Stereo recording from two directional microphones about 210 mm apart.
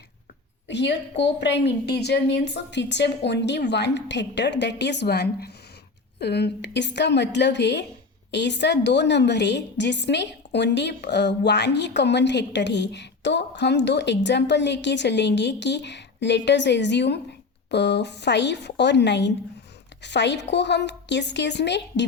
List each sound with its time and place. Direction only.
0.7 s a woman's voice: 55° left (ahead or behind)